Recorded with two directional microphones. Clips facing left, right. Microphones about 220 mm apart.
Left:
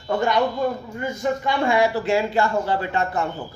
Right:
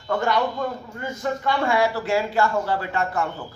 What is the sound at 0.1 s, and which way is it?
A woman's voice, 20° left (ahead or behind).